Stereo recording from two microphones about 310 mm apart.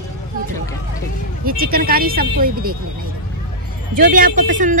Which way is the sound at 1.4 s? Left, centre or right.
Right.